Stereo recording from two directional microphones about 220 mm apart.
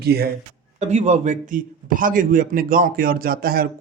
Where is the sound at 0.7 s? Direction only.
30° right (ahead or behind).